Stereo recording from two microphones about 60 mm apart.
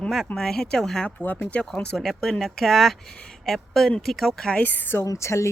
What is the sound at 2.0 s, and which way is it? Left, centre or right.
Speech, centre.